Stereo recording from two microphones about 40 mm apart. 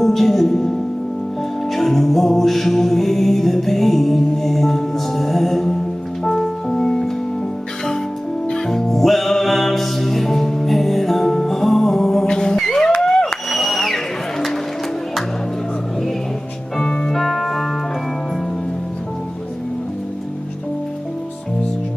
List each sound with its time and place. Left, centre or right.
0.0 s speech: centre
1.7 s music: centre
8.5 s music: centre
13.0 s a sound: centre
16.8 s organ: left
17.1 s music: centre